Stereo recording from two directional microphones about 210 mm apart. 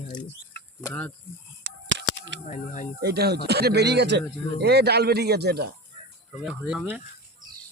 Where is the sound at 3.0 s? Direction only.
50° right (ahead or behind).